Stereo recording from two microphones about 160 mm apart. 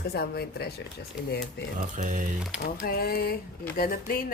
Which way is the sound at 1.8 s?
50° right (ahead or behind).